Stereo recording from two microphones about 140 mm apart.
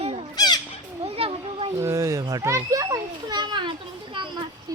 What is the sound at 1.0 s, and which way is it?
Speech, 45° right (ahead or behind).